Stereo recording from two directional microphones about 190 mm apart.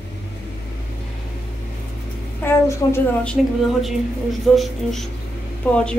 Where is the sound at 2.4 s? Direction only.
10° left (ahead or behind).